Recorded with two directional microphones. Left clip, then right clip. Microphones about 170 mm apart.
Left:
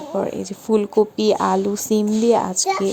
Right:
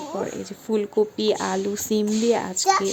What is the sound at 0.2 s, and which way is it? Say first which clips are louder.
Speech: left 5 dB; 20° left (ahead or behind).